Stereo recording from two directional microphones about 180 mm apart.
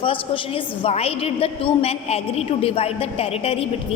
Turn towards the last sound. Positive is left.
turn(degrees=35)  # may be behind; listen again after turning